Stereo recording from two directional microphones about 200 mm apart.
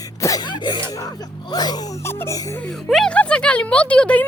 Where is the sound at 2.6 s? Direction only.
Centre (ahead or behind).